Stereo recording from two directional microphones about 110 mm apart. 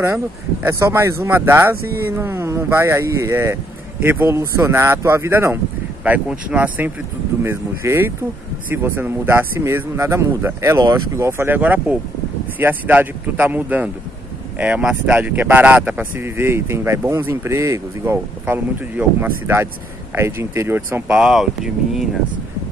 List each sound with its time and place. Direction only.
0.7 s speech: 25° right (ahead or behind)
18.4 s speech: 15° right (ahead or behind)
21.1 s speech: 5° right (ahead or behind)